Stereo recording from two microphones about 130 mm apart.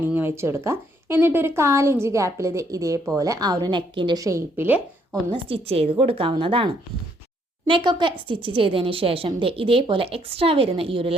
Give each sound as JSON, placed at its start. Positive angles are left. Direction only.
{"t": 0.0, "sound": "speech", "side_deg": -15}
{"t": 5.3, "sound": "a woman's voice", "side_deg": -45}
{"t": 7.7, "sound": "a woman's voice", "side_deg": -40}